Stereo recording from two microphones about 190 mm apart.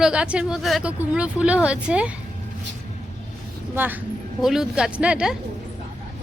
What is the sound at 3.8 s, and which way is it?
Speech, 10° right (ahead or behind).